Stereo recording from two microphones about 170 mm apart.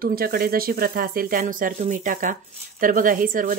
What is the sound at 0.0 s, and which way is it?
Speech, 60° right (ahead or behind).